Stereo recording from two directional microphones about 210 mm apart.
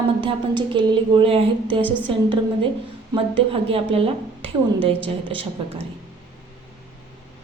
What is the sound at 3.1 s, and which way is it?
A woman's voice, 25° right (ahead or behind).